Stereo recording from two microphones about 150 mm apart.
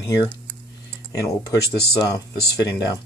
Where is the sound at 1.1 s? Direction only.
25° left (ahead or behind).